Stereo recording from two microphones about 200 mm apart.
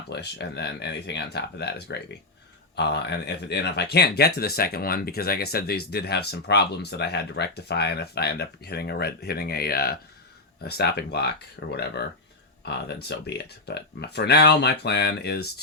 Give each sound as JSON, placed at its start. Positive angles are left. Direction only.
{"t": 0.1, "sound": "speech", "side_deg": 55}